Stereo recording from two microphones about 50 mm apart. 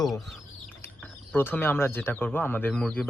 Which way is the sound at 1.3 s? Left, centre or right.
Left.